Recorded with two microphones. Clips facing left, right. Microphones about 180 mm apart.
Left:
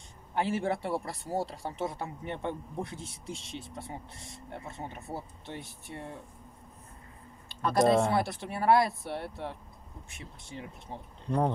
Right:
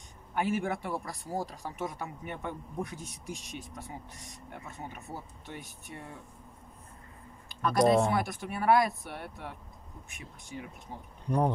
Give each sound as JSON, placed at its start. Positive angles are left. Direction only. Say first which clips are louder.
{"t": 0.3, "sound": "speech", "louder": "left 1 dB", "side_deg": 30}
{"t": 7.6, "sound": "speech", "louder": "even", "side_deg": 25}